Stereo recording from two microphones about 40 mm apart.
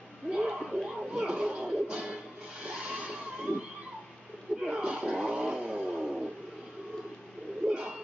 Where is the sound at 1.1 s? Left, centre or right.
Right.